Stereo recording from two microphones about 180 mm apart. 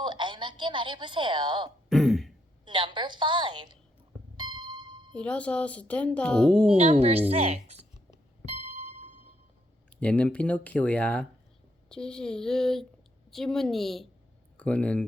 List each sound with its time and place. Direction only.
0.0 s a woman's voice: 25° right (ahead or behind)
1.9 s throat clearing: centre (ahead or behind)
2.6 s a woman's voice: 25° right (ahead or behind)
4.4 s music: 25° right (ahead or behind)
5.1 s speech: 5° left (ahead or behind)
6.7 s speech: 35° right (ahead or behind)
8.4 s music: 35° right (ahead or behind)
10.0 s speech: 5° left (ahead or behind)